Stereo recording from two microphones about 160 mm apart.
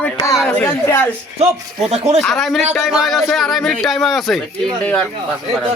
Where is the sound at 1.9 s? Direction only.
40° right (ahead or behind).